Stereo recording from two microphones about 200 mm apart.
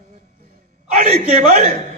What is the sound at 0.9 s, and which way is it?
Speech, 35° right (ahead or behind).